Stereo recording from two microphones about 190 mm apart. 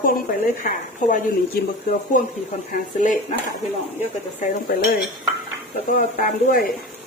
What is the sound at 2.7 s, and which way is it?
Speech, 40° left (ahead or behind).